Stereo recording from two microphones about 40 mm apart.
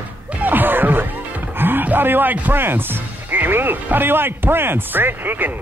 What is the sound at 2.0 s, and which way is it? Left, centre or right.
Speech, right.